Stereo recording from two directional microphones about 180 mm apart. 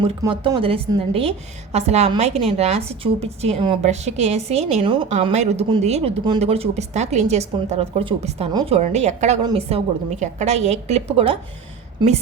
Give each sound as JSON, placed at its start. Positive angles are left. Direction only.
{"t": 0.2, "sound": "a woman's voice", "side_deg": -25}